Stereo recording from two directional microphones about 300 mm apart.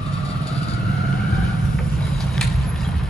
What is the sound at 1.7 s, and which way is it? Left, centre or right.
Vehicle, centre.